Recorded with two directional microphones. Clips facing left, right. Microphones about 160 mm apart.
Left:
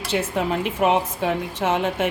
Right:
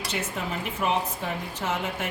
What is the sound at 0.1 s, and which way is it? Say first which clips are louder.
A woman's voice: left 10 dB; 65° left (ahead or behind).